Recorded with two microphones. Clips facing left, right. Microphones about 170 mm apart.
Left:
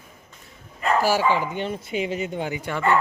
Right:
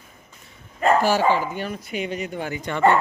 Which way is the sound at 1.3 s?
20° left (ahead or behind).